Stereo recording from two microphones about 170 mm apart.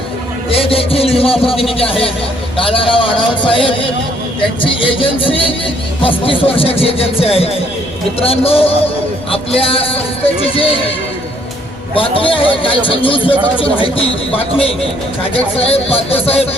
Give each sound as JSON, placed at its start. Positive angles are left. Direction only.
{"t": 0.5, "sound": "a sound", "side_deg": 35}
{"t": 1.8, "sound": "speech", "side_deg": 35}
{"t": 11.9, "sound": "speech", "side_deg": 30}